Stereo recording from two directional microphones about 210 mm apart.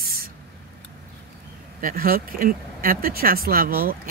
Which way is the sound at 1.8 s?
40° right (ahead or behind).